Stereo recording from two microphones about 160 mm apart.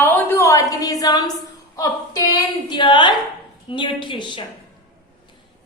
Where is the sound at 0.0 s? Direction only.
15° left (ahead or behind).